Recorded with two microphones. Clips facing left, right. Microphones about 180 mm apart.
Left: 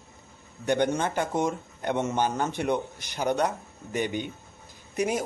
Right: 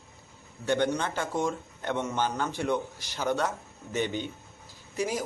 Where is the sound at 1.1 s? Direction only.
20° left (ahead or behind).